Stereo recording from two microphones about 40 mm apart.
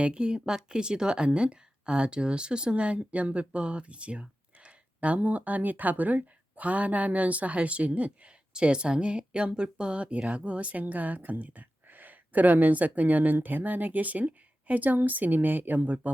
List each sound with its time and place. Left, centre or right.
0.0 s a woman's voice: right
8.5 s speech: right